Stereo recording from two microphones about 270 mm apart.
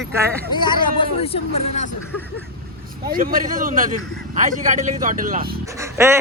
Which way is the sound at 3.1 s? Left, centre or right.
Right.